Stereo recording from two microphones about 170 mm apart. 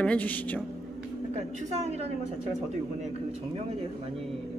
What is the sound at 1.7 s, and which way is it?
Speech, 40° right (ahead or behind).